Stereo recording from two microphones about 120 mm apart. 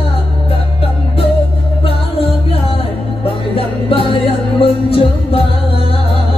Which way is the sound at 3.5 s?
50° left (ahead or behind).